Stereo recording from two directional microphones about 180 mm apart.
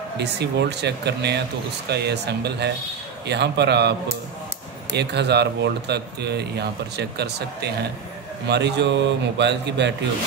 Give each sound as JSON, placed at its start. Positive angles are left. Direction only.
{"t": 0.2, "sound": "speech", "side_deg": -70}
{"t": 4.9, "sound": "speech", "side_deg": -70}